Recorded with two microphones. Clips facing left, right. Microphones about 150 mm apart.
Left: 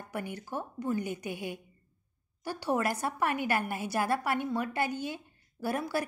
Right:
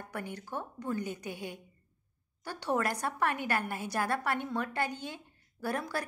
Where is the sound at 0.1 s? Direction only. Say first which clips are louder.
Left 3 dB; 10° left (ahead or behind).